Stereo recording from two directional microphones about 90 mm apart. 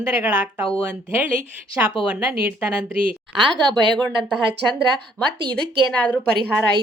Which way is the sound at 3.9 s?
5° left (ahead or behind).